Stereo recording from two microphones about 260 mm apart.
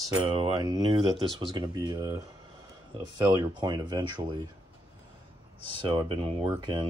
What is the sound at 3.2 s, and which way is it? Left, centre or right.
Speech, centre.